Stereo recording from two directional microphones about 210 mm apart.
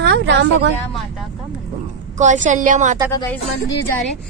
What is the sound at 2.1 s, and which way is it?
Speech, 35° right (ahead or behind).